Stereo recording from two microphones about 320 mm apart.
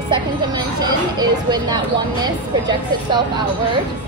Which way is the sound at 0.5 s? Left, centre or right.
Centre.